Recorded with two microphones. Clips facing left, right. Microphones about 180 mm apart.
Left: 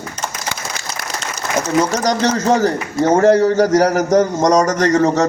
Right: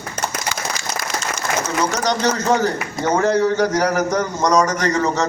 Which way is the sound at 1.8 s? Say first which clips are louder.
Left 1 dB; 45° left (ahead or behind).